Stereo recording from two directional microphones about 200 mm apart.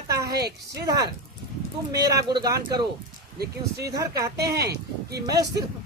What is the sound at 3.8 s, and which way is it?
Speech, 15° right (ahead or behind).